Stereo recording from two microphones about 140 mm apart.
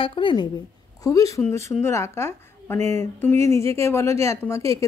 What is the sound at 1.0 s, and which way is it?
A woman's voice, 25° left (ahead or behind).